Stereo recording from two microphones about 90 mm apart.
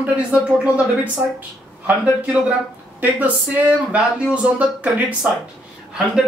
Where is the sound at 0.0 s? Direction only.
15° right (ahead or behind).